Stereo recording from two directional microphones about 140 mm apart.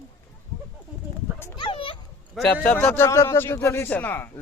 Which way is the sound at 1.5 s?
35° left (ahead or behind).